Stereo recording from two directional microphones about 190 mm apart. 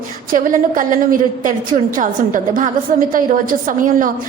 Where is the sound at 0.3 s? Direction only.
45° right (ahead or behind).